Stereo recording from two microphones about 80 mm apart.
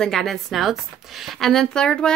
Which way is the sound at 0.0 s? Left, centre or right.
Centre.